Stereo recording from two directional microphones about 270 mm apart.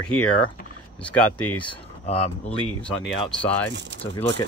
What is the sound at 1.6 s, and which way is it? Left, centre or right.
Speech, left.